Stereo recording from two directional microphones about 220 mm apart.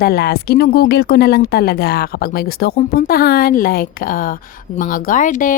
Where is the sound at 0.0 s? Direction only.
45° left (ahead or behind).